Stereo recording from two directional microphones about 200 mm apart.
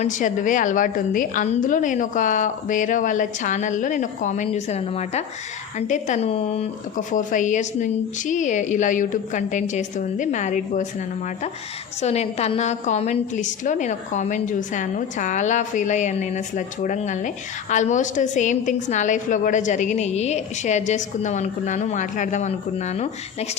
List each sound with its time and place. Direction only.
0.0 s a woman's voice: 40° left (ahead or behind)
12.0 s a woman's voice: 35° left (ahead or behind)